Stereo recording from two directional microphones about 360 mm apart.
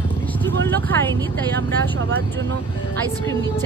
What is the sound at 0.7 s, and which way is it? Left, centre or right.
Vehicle, centre.